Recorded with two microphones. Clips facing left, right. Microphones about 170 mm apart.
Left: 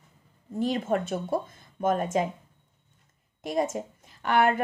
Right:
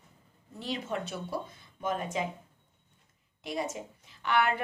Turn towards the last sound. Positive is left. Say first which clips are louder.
# left 5 dB
turn(degrees=45)  # may be behind; listen again after turning